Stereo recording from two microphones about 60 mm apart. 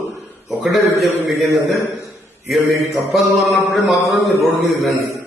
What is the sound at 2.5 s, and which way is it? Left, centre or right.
A man's voice, centre.